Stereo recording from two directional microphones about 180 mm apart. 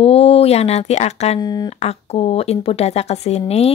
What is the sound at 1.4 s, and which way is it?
Speech, 20° left (ahead or behind).